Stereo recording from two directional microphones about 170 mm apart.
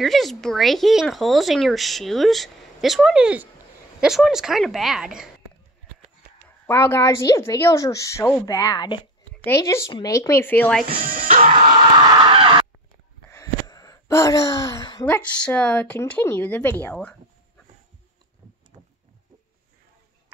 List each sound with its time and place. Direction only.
0.0 s speech: centre (ahead or behind)
6.7 s a woman's voice: 15° left (ahead or behind)
10.9 s speech: 55° right (ahead or behind)
11.4 s a sound: 30° right (ahead or behind)
13.3 s gasp: 20° left (ahead or behind)
15.0 s a woman's voice: 10° left (ahead or behind)